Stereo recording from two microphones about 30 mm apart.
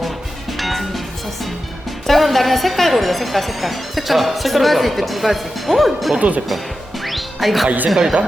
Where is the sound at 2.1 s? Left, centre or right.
Centre.